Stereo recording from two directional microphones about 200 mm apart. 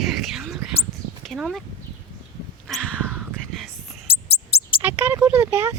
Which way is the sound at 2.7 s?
5° left (ahead or behind).